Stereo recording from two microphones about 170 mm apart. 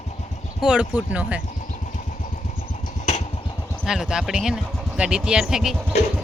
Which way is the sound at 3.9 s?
5° right (ahead or behind).